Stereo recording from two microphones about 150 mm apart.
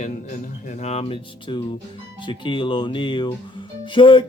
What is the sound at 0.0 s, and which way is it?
Speech, 50° left (ahead or behind).